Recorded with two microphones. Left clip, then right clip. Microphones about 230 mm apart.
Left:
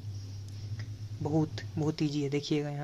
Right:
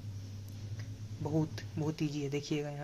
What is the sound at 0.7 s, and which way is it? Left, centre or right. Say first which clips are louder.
Speech: left 3 dB; centre.